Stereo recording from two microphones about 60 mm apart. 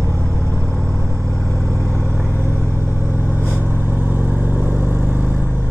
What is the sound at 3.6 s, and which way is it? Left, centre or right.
Vehicle, right.